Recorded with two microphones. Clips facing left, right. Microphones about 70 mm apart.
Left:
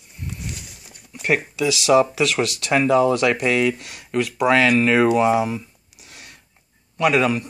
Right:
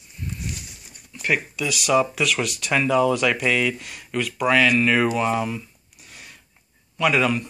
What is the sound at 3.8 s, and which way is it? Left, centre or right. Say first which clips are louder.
Speech: even; left.